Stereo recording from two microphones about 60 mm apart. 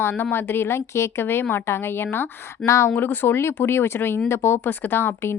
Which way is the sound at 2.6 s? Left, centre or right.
Left.